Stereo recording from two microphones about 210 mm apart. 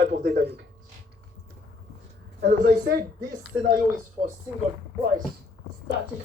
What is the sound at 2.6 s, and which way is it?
Speech, 50° right (ahead or behind).